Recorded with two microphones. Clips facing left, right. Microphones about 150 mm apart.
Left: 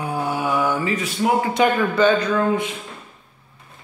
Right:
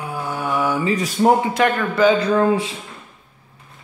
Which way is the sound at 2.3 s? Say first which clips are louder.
Right 3 dB; 30° right (ahead or behind).